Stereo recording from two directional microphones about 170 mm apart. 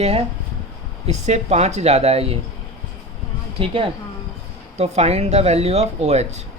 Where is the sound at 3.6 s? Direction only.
30° right (ahead or behind).